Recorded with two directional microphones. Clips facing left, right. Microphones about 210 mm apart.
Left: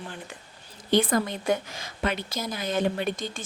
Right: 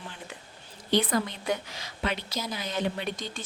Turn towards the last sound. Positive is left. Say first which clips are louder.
# left 4 dB
turn(degrees=50)  # may be behind; listen again after turning